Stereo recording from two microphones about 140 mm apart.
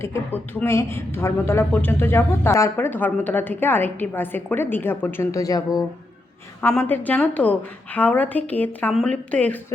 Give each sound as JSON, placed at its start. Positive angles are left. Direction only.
{"t": 0.0, "sound": "a woman's voice", "side_deg": 20}
{"t": 6.6, "sound": "a woman's voice", "side_deg": 15}